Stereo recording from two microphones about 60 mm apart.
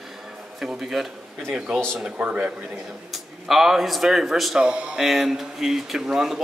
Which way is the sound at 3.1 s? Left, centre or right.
Centre.